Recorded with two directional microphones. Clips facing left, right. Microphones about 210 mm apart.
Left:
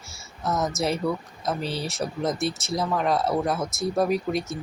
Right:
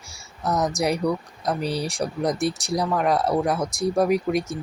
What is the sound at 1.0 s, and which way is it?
Speech, 15° right (ahead or behind).